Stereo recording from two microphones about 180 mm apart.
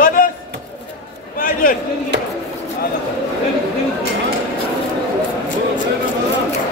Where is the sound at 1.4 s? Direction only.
50° left (ahead or behind).